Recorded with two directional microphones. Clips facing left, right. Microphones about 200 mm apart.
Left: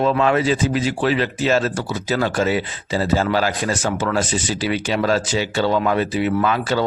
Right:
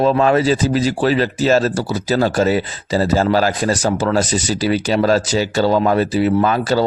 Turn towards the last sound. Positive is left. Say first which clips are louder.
# right 4 dB
turn(degrees=-40)  # may be behind; listen again after turning